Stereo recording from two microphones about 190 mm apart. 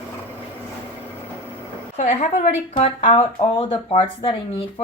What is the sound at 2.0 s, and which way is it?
Speech, 40° left (ahead or behind).